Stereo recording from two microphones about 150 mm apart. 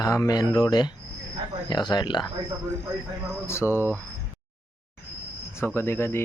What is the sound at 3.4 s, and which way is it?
Speech, 15° left (ahead or behind).